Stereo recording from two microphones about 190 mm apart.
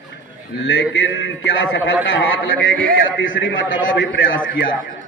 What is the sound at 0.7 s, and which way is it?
A man's voice, 90° left.